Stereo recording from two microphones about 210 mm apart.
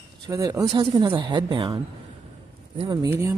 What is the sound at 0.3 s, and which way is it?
Speech, 15° right (ahead or behind).